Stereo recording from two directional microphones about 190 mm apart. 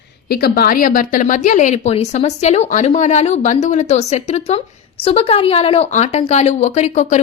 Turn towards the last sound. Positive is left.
turn(degrees=40)  # may be behind; listen again after turning